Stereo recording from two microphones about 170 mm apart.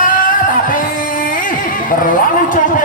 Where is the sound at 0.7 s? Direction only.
55° left (ahead or behind).